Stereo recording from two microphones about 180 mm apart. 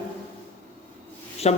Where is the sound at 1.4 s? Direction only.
35° left (ahead or behind).